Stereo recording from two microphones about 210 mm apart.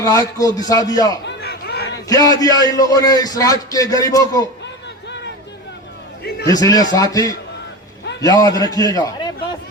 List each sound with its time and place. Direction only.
0.0 s a man's voice: 15° left (ahead or behind)
1.2 s chatter: 50° left (ahead or behind)
2.0 s a man's voice: 15° left (ahead or behind)
6.5 s a man's voice: 15° left (ahead or behind)